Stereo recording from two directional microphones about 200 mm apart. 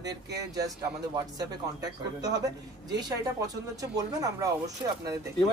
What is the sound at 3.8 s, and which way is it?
Speech, 15° right (ahead or behind).